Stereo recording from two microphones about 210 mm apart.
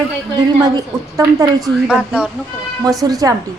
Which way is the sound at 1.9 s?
5° right (ahead or behind).